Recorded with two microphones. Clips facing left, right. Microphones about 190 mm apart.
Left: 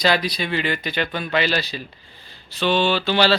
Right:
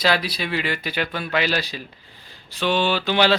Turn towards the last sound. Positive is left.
turn(degrees=-15)  # may be behind; listen again after turning